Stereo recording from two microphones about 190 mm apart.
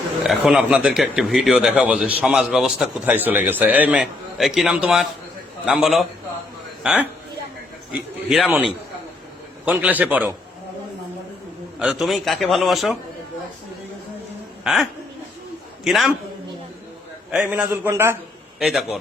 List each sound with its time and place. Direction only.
0.3 s a man's voice: 5° right (ahead or behind)
8.3 s a man's voice: centre (ahead or behind)
11.8 s speech: centre (ahead or behind)
14.6 s speech: centre (ahead or behind)
17.4 s a man's voice: 5° right (ahead or behind)
18.6 s speech: centre (ahead or behind)